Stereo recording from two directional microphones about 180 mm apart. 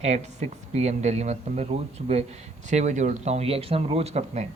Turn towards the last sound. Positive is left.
turn(degrees=-40)  # may be behind; listen again after turning